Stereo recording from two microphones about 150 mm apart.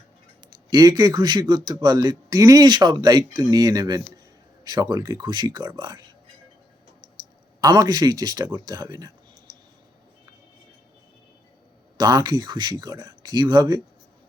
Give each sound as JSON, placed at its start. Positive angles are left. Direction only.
{"t": 0.4, "sound": "a man's voice", "side_deg": -30}
{"t": 7.6, "sound": "a man's voice", "side_deg": -25}
{"t": 11.9, "sound": "a man's voice", "side_deg": -25}